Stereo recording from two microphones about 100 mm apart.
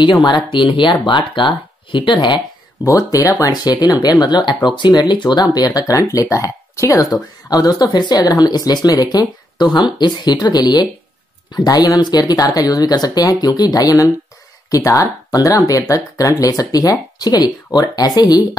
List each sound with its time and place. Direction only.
0.5 s speech: 55° left (ahead or behind)
2.9 s speech: 35° left (ahead or behind)